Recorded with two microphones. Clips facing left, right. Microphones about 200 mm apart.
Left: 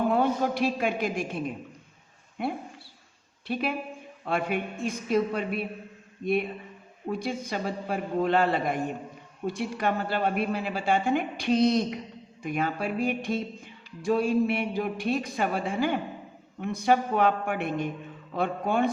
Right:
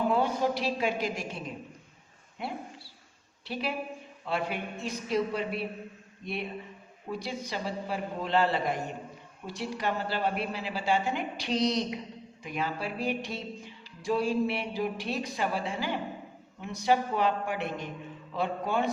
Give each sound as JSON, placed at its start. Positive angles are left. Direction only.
{"t": 0.2, "sound": "a man's voice", "side_deg": 55}
{"t": 3.4, "sound": "a woman's voice", "side_deg": 55}
{"t": 4.3, "sound": "music", "side_deg": 55}
{"t": 16.6, "sound": "a man's voice", "side_deg": 55}